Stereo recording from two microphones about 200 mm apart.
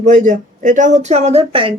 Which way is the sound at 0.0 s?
35° right (ahead or behind).